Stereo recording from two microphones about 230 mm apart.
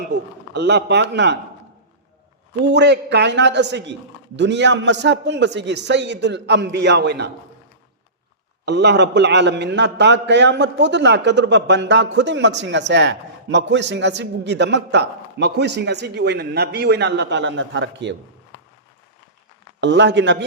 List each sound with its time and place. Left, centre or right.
0.5 s a man's voice: right
2.7 s a man's voice: right
8.6 s a man's voice: right
19.8 s a man's voice: right